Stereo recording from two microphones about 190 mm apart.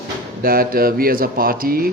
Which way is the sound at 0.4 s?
50° right (ahead or behind).